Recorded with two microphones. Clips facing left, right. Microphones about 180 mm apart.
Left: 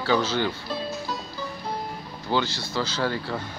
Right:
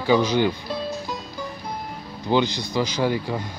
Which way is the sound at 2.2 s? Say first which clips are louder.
Right 5 dB; 15° right (ahead or behind).